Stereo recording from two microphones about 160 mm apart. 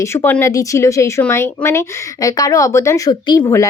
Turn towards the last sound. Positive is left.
turn(degrees=15)  # may be behind; listen again after turning